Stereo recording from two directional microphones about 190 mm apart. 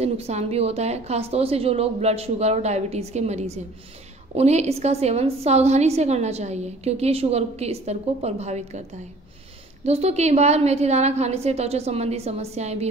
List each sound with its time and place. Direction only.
0.0 s a woman's voice: 35° right (ahead or behind)
9.8 s a woman's voice: 35° right (ahead or behind)